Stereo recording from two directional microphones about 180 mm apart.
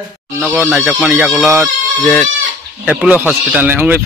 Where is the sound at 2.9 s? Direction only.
10° right (ahead or behind).